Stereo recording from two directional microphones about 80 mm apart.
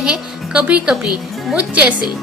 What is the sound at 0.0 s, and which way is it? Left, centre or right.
A woman's voice, centre.